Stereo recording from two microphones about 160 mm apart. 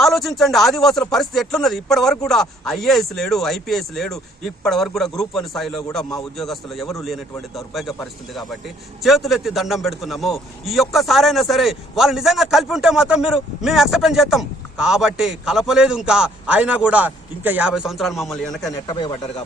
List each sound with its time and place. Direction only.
0.0 s a man's voice: centre (ahead or behind)
18.6 s speech: 25° left (ahead or behind)